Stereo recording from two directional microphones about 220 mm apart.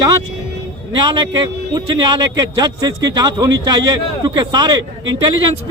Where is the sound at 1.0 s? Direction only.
20° right (ahead or behind).